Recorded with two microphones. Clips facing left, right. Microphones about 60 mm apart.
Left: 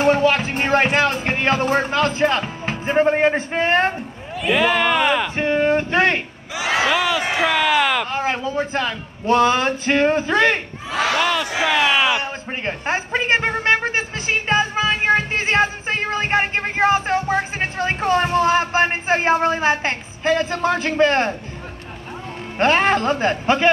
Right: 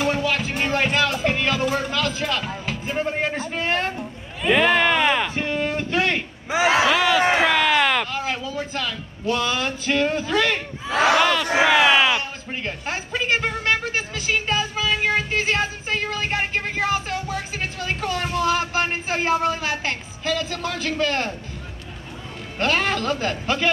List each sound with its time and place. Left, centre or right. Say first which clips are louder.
0.0 s speech: left 6 dB; left
4.4 s speech: even; centre
5.3 s a man's voice: left 7 dB; left
6.5 s speech: right 4 dB; right
7.4 s a sound: left 1 dB; centre
8.1 s a man's voice: left 5 dB; left
11.7 s speech: even; centre
12.1 s a sound: left 2 dB; left
22.6 s a man's voice: left 6 dB; left